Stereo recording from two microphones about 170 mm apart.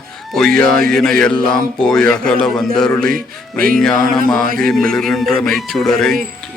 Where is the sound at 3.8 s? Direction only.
5° left (ahead or behind).